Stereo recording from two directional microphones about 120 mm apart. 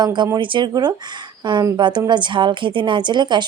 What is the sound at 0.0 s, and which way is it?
Speech, 35° right (ahead or behind).